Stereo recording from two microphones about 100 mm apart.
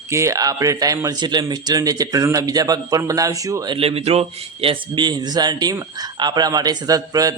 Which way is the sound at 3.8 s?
80° right.